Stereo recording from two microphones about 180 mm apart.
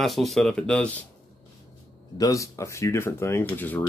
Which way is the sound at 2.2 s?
15° left (ahead or behind).